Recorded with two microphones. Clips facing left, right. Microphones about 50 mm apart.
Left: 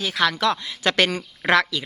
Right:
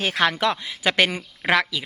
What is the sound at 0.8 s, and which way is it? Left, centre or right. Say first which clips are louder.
Speech: even; centre.